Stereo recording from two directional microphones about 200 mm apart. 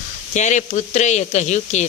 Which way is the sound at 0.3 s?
35° left (ahead or behind).